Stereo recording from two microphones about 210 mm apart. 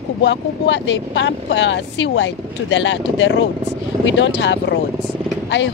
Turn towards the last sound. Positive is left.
turn(degrees=60)  # may be behind; listen again after turning